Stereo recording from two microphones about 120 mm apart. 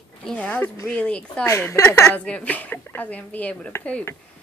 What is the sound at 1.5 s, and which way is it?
Speech, 25° left (ahead or behind).